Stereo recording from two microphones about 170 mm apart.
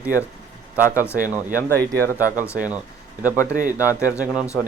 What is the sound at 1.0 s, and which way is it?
Speech, 15° left (ahead or behind).